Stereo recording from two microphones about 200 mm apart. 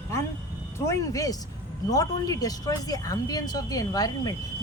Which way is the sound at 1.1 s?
15° left (ahead or behind).